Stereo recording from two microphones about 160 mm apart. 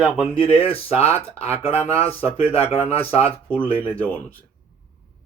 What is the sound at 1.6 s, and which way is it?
Speech, 40° left (ahead or behind).